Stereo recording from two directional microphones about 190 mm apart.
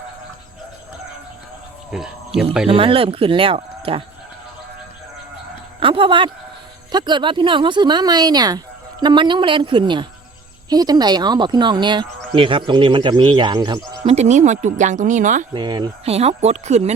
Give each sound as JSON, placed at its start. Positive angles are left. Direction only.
{"t": 1.9, "sound": "speech", "side_deg": 0}
{"t": 2.6, "sound": "speech", "side_deg": -30}
{"t": 5.8, "sound": "speech", "side_deg": -25}
{"t": 14.0, "sound": "speech", "side_deg": -35}
{"t": 15.5, "sound": "speech", "side_deg": -25}